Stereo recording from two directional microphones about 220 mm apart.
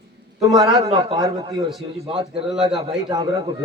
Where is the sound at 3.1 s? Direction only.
15° right (ahead or behind).